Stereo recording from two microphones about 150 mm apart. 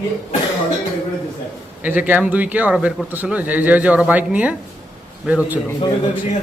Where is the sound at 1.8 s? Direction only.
10° right (ahead or behind).